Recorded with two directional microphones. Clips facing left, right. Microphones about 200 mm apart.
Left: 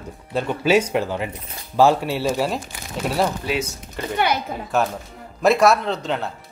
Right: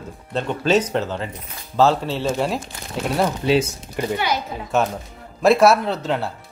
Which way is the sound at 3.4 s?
25° right (ahead or behind).